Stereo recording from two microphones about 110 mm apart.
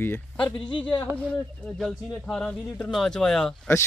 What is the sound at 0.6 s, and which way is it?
Speech, 50° left (ahead or behind).